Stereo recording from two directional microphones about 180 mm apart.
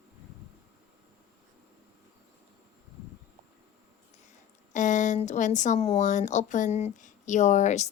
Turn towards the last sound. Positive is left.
turn(degrees=40)  # may be behind; listen again after turning